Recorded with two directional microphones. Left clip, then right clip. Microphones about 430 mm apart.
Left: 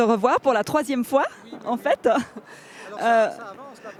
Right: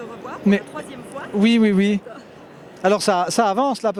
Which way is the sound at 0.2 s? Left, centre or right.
Left.